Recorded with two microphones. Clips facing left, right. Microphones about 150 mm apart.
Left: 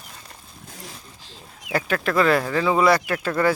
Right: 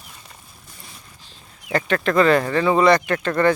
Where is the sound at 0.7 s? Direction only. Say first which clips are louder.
Left 6 dB; 90° left.